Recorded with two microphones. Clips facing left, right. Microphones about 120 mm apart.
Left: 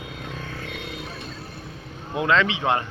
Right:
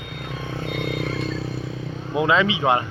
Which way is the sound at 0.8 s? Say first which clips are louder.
Right 9 dB; 65° right (ahead or behind).